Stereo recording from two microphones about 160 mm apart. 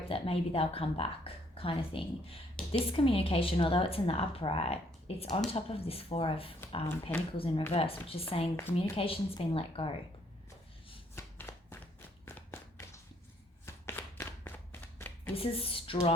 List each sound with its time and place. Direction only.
0.1 s a woman's voice: 35° left (ahead or behind)
6.8 s speech: 15° left (ahead or behind)
7.3 s a woman's voice: 35° left (ahead or behind)
11.1 s shuffling cards: 15° left (ahead or behind)
12.2 s a sound: 15° left (ahead or behind)
13.7 s clapping: 15° left (ahead or behind)
15.4 s a woman's voice: 35° left (ahead or behind)